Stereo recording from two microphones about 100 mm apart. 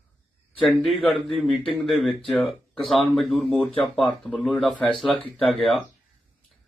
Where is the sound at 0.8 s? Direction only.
5° left (ahead or behind).